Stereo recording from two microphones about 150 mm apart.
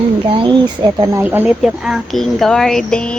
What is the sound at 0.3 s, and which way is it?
Speech, 30° right (ahead or behind).